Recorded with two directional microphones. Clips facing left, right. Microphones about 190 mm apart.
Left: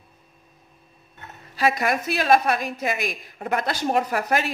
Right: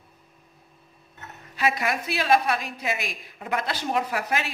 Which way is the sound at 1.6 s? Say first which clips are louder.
Left 3 dB; 40° left (ahead or behind).